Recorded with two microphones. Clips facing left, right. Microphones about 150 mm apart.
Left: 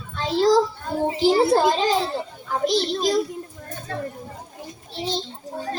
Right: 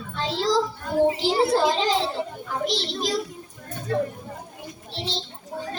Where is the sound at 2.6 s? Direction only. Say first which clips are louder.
Left 7 dB; 45° left (ahead or behind).